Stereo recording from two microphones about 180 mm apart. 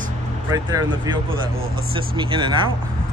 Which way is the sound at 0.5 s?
25° right (ahead or behind).